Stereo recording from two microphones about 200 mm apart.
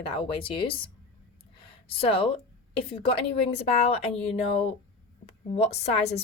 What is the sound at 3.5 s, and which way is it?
Speech, 30° left (ahead or behind).